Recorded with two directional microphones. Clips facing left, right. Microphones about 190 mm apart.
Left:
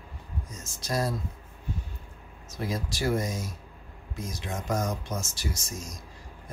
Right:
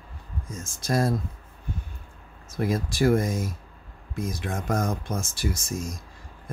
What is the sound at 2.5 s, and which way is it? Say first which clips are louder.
Speech: right 6 dB; 55° right (ahead or behind).